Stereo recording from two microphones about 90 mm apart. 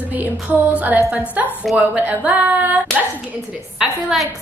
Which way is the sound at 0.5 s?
15° right (ahead or behind).